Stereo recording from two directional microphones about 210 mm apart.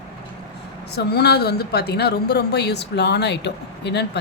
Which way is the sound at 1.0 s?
50° left (ahead or behind).